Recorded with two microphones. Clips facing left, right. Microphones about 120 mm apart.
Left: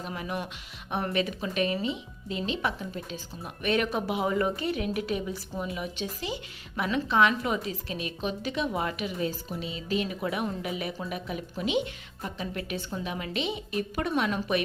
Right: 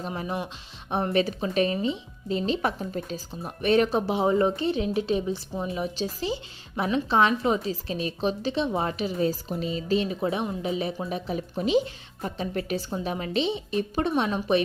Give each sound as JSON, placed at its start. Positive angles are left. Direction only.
{"t": 0.0, "sound": "speech", "side_deg": -35}